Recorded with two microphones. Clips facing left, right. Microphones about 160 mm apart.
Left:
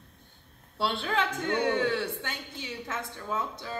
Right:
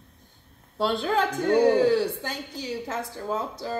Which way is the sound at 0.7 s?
45° right (ahead or behind).